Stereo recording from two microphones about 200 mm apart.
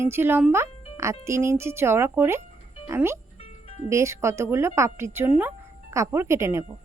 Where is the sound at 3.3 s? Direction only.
30° left (ahead or behind).